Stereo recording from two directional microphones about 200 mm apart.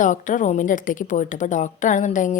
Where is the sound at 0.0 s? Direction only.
40° left (ahead or behind).